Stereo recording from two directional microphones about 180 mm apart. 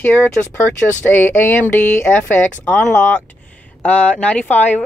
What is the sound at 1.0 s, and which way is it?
Speech, 10° left (ahead or behind).